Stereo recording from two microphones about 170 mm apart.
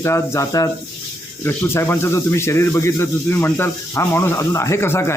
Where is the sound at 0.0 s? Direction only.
15° left (ahead or behind).